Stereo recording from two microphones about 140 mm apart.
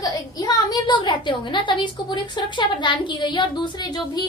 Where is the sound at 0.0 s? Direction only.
30° left (ahead or behind).